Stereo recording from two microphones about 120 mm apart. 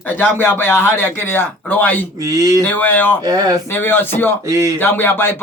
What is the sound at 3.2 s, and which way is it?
Speech, 35° right (ahead or behind).